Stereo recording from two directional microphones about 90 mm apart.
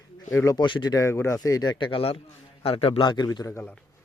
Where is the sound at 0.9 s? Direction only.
35° left (ahead or behind); by 3.0 s 90° left.